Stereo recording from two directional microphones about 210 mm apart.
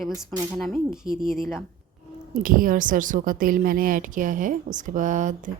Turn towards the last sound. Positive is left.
turn(degrees=-40)  # may be behind; listen again after turning